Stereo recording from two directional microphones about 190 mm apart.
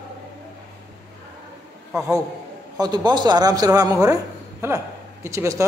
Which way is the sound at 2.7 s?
20° right (ahead or behind).